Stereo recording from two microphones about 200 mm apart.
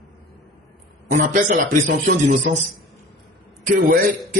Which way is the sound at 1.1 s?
40° right (ahead or behind).